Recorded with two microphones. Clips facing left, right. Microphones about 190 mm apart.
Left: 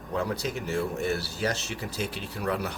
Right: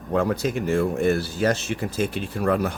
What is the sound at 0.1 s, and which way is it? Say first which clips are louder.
A man's voice: right 7 dB; 55° right (ahead or behind).